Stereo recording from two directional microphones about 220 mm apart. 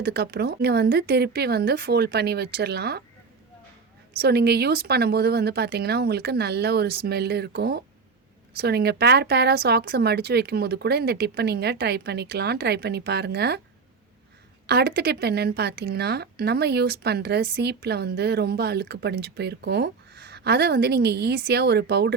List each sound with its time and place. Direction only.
0.0 s speech: 45° right (ahead or behind)
4.2 s speech: 45° right (ahead or behind)
14.7 s speech: 50° right (ahead or behind)